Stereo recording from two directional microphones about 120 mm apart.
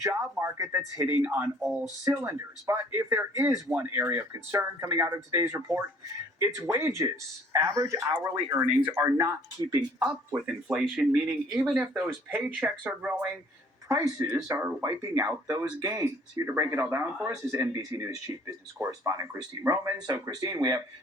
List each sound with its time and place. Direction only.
0.0 s speech: 25° right (ahead or behind)
1.0 s speech: 15° right (ahead or behind)
1.8 s speech: 30° right (ahead or behind)
8.9 s speech: 20° right (ahead or behind)
9.1 s speech: 30° right (ahead or behind)
10.0 s speech: 10° right (ahead or behind)
13.8 s speech: 25° right (ahead or behind)